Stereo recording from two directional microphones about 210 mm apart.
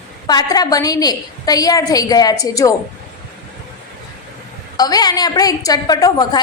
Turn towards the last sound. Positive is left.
turn(degrees=20)  # may be behind; listen again after turning